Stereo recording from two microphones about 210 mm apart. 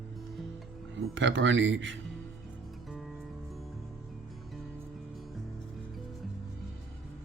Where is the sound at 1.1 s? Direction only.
65° right (ahead or behind).